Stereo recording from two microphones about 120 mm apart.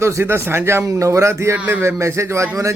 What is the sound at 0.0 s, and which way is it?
A man's voice, 20° right (ahead or behind).